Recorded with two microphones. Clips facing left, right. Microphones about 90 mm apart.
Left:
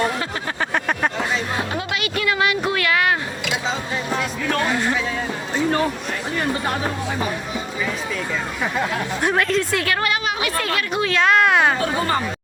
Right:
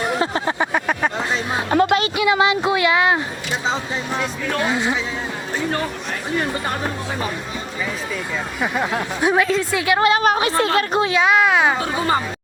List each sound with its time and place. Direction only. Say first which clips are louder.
0.2 s vehicle: right 6 dB; 25° right (ahead or behind)
0.6 s vehicle: left 2 dB; 5° right (ahead or behind)
1.7 s music: right 9 dB; 45° right (ahead or behind)
2.1 s a sound: right 4 dB; 20° right (ahead or behind)
4.2 s speech: right 1 dB; 5° right (ahead or behind)
6.3 s speech: right 1 dB; centre (ahead or behind)
9.2 s speech: right 3 dB; 5° right (ahead or behind)
9.9 s a woman's voice: right 9 dB; 25° right (ahead or behind)
10.2 s a woman's voice: right 6 dB; 40° right (ahead or behind)
11.1 s speech: left 1 dB; 5° right (ahead or behind)